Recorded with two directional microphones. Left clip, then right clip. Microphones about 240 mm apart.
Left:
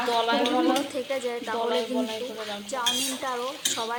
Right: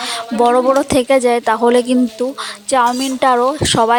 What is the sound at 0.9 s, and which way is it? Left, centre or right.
Speech, right.